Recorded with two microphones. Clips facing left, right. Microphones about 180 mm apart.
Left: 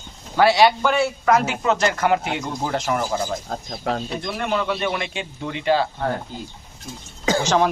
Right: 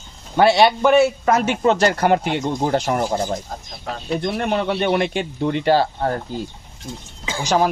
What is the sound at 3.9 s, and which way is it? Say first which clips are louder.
Speech: left 6 dB; 70° left (ahead or behind).